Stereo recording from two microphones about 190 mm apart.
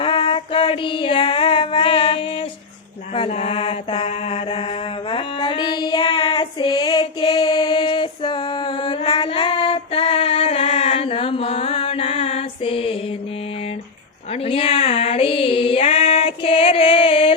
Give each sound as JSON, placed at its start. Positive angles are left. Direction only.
{"t": 0.0, "sound": "child singing", "side_deg": 30}
{"t": 3.2, "sound": "mantra", "side_deg": 30}
{"t": 5.1, "sound": "child singing", "side_deg": 25}
{"t": 14.4, "sound": "music", "side_deg": 30}